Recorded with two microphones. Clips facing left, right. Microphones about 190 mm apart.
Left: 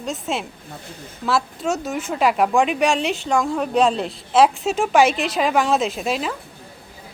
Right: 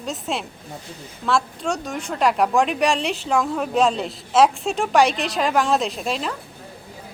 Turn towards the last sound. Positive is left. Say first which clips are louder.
# left 2 dB
turn(degrees=5)  # may be behind; listen again after turning